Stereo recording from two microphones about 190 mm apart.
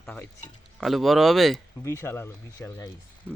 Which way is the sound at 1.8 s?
15° left (ahead or behind).